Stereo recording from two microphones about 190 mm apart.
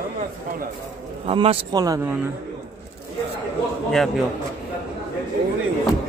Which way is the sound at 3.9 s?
Centre (ahead or behind).